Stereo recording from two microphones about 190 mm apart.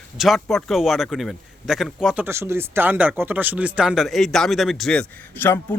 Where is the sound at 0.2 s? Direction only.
Centre (ahead or behind).